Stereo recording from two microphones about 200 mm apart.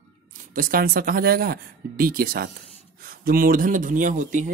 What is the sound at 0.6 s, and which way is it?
Speech, 45° right (ahead or behind).